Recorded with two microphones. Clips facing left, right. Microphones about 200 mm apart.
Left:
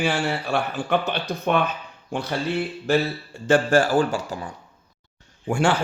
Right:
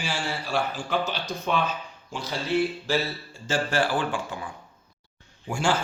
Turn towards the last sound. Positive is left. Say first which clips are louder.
# left 4 dB
turn(degrees=65)  # may be behind; listen again after turning